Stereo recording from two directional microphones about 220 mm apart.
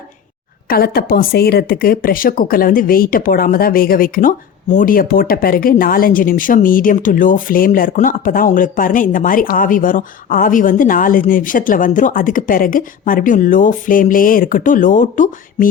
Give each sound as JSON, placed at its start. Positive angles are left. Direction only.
{"t": 0.7, "sound": "a woman's voice", "side_deg": 45}